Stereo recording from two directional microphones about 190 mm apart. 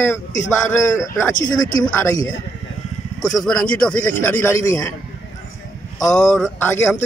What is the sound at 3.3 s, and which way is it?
Speech, 5° left (ahead or behind).